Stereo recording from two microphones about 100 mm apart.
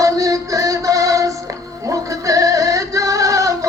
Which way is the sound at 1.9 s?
35° right (ahead or behind).